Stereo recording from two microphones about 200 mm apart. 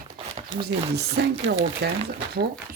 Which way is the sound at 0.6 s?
55° right (ahead or behind).